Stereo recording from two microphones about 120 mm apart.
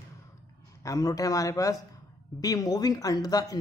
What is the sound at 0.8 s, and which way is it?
A man's voice, 30° left (ahead or behind).